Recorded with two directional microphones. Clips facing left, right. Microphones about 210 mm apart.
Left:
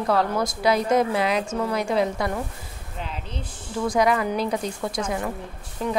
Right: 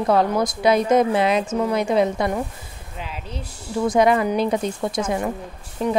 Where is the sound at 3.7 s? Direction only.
25° right (ahead or behind).